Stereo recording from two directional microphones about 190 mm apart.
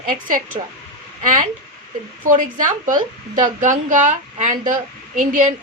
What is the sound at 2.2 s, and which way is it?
A woman's voice, 45° right (ahead or behind).